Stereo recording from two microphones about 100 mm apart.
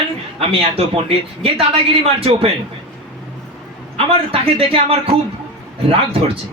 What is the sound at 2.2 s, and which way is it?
Speech, 70° right (ahead or behind).